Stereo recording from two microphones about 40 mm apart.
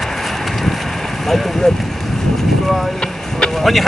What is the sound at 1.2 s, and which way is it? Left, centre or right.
Speech, centre.